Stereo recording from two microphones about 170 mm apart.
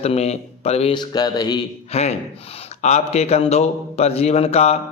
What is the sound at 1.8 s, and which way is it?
A man's voice, 40° left (ahead or behind).